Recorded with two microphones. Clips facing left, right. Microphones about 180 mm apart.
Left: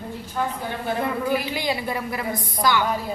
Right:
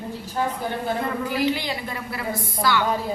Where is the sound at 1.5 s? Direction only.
15° left (ahead or behind).